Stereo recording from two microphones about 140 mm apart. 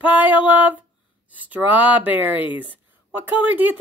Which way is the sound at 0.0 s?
10° right (ahead or behind).